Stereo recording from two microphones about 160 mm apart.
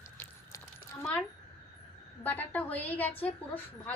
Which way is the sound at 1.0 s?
5° left (ahead or behind).